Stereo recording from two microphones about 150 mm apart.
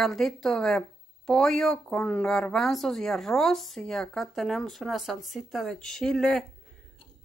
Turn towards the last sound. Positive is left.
turn(degrees=5)  # may be behind; listen again after turning